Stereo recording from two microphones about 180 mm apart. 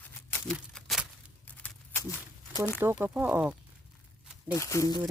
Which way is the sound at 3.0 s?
10° right (ahead or behind).